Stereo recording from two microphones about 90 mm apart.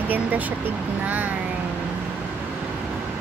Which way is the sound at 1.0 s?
20° right (ahead or behind).